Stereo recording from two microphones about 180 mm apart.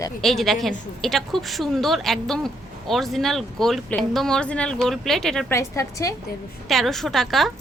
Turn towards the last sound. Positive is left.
turn(degrees=0)  # may be behind; listen again after turning